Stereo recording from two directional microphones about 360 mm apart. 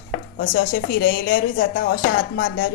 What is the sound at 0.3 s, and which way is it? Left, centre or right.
A woman's voice, left.